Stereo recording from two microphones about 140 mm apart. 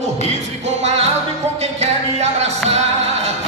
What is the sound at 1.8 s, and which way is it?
Music, 50° right (ahead or behind).